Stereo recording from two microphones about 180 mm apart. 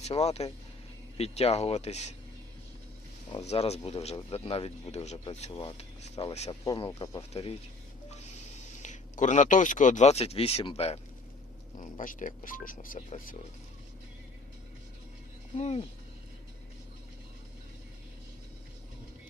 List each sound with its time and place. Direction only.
0.0 s speech: 35° left (ahead or behind)
3.4 s speech: 35° left (ahead or behind)
6.7 s speech: 25° left (ahead or behind)
7.2 s speech: 35° left (ahead or behind)
11.8 s speech: 45° left (ahead or behind)
15.5 s speech: 35° left (ahead or behind)